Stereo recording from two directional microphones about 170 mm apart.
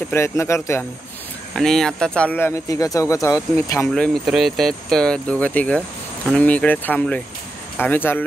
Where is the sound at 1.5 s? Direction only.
5° left (ahead or behind).